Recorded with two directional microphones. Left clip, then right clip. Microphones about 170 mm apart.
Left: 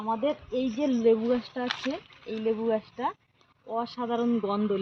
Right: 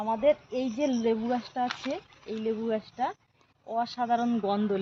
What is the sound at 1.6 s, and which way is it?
Speech, 85° left.